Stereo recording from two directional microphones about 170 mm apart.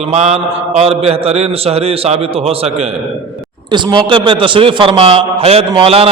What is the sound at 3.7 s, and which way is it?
A man's voice, 30° right (ahead or behind).